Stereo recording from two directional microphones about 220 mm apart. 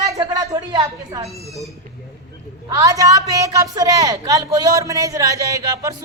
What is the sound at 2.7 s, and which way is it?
A man's voice, 15° right (ahead or behind).